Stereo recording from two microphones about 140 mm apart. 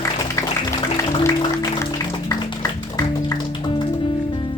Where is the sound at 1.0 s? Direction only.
20° left (ahead or behind).